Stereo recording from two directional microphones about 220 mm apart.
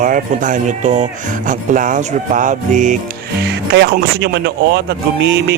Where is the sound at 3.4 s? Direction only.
50° right (ahead or behind).